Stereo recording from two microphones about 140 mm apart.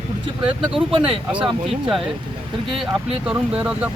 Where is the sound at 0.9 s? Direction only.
40° right (ahead or behind).